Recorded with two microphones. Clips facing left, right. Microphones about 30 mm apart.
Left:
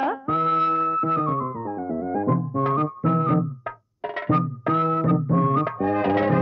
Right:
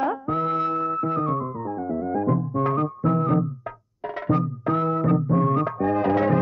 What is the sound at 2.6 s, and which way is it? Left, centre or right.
Music, left.